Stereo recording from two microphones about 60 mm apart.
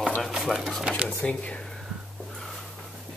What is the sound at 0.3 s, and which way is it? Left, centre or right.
Speech, centre.